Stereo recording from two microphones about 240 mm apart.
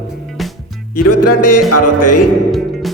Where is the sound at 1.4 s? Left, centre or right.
Left.